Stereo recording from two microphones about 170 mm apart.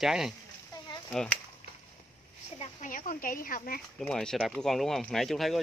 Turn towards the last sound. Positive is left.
turn(degrees=0)  # may be behind; listen again after turning